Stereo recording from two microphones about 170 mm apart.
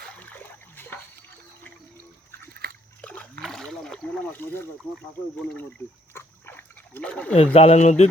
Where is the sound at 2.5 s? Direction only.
70° right (ahead or behind).